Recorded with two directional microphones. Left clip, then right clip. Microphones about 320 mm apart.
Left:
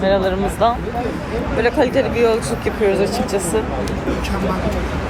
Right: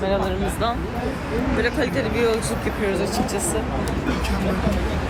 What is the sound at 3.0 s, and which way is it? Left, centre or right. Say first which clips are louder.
Speech: left 5 dB; left.